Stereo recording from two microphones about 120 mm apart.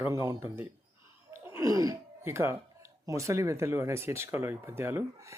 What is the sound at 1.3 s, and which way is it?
Laughter, 20° right (ahead or behind).